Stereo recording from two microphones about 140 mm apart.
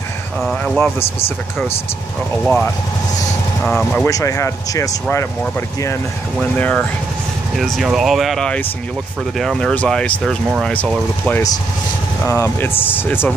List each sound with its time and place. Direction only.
0.4 s speech: centre (ahead or behind)
0.7 s speech: 15° left (ahead or behind)
2.4 s speech: 10° left (ahead or behind)
4.0 s speech: 20° left (ahead or behind)
6.5 s speech: 10° left (ahead or behind)
7.5 s speech: centre (ahead or behind)
12.3 s speech: 20° left (ahead or behind)